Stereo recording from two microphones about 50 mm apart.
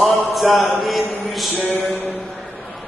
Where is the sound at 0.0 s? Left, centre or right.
Centre.